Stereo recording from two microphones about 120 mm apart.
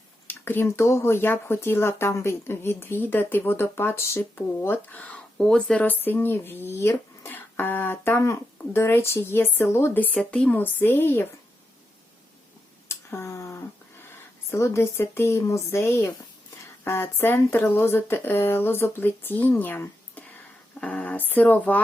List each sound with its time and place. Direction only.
0.3 s speech: 15° left (ahead or behind)
12.9 s a sound: 25° left (ahead or behind)
14.5 s speech: 20° left (ahead or behind)